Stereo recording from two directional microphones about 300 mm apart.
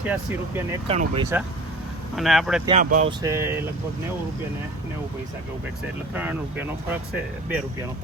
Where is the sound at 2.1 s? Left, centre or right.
Centre.